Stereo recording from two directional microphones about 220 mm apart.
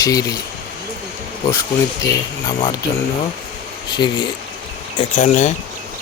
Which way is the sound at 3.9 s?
20° left (ahead or behind).